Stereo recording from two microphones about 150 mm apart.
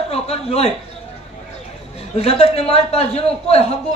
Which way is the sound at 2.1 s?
45° left (ahead or behind).